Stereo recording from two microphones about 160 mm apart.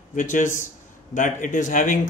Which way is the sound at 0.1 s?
55° left (ahead or behind).